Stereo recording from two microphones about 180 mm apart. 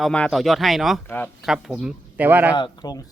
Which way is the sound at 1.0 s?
10° left (ahead or behind).